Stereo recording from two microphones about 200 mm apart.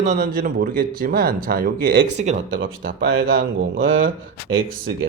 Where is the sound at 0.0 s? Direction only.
40° right (ahead or behind).